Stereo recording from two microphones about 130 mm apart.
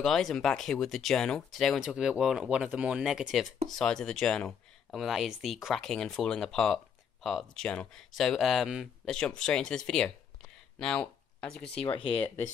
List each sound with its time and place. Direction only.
0.0 s speech: 5° left (ahead or behind)
11.8 s speech: 40° left (ahead or behind)